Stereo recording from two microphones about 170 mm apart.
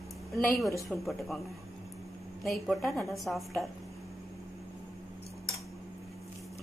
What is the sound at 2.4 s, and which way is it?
A woman's voice, centre (ahead or behind).